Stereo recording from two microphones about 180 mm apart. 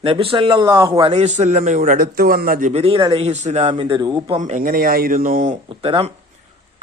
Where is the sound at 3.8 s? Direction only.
25° right (ahead or behind).